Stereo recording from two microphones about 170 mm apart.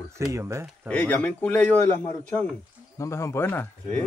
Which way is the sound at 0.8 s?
10° left (ahead or behind).